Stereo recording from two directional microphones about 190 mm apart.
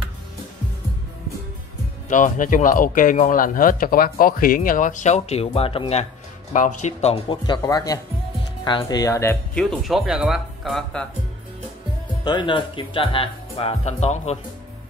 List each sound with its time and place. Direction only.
2.0 s speech: 45° left (ahead or behind); by 9.4 s 15° left (ahead or behind)
9.6 s speech: centre (ahead or behind)
12.3 s speech: 25° left (ahead or behind)